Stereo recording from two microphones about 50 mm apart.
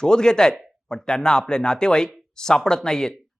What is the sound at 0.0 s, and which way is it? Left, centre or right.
Speech, centre.